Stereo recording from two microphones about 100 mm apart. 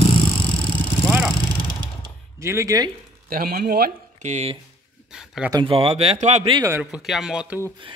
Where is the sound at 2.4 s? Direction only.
30° right (ahead or behind).